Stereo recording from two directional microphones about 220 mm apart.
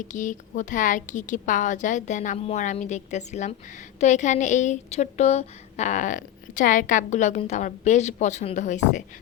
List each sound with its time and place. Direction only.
0.1 s a woman's voice: 35° left (ahead or behind)